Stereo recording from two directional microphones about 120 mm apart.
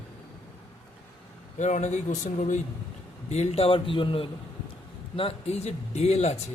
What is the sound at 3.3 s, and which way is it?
Speech, 60° left (ahead or behind).